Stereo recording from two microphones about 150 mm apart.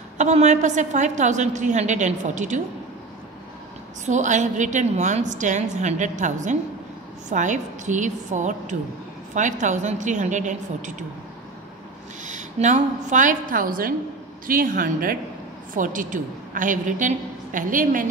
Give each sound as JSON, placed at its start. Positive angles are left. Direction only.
{"t": 0.2, "sound": "a woman's voice", "side_deg": -50}
{"t": 4.0, "sound": "a woman's voice", "side_deg": -55}
{"t": 12.3, "sound": "a woman's voice", "side_deg": -55}